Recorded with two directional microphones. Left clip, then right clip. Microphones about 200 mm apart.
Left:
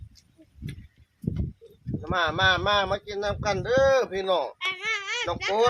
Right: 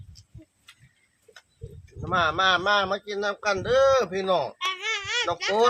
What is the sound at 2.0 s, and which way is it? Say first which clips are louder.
Speech: right 1 dB; 15° left (ahead or behind).